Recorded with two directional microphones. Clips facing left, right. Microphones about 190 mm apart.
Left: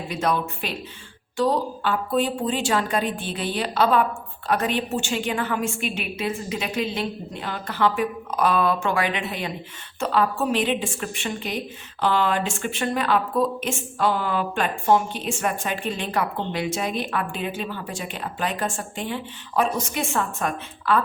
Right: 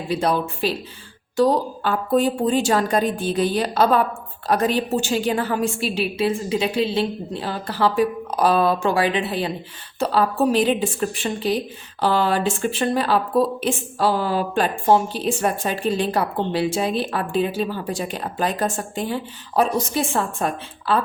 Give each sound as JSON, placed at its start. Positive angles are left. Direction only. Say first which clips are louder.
{"t": 0.1, "sound": "a woman's voice", "louder": "right 4 dB", "side_deg": -30}